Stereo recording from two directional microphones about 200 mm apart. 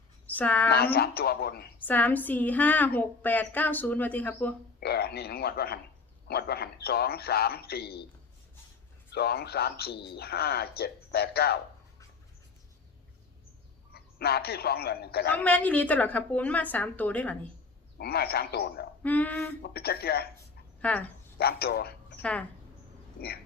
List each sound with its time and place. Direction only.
0.3 s a woman's voice: 5° left (ahead or behind)
0.7 s speech: 50° left (ahead or behind)
1.8 s a woman's voice: 10° left (ahead or behind)
4.8 s speech: 50° left (ahead or behind)
9.1 s speech: 50° left (ahead or behind)
13.9 s a man's voice: 50° left (ahead or behind)
15.3 s a woman's voice: 5° left (ahead or behind)
17.9 s speech: 50° left (ahead or behind)
19.0 s a woman's voice: 10° left (ahead or behind)
19.6 s speech: 50° left (ahead or behind)
20.8 s a woman's voice: 10° left (ahead or behind)
21.3 s speech: 50° left (ahead or behind)
22.2 s a woman's voice: 5° left (ahead or behind)